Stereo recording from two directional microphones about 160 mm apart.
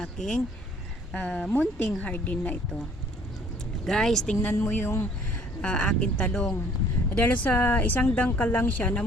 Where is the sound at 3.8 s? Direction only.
5° left (ahead or behind).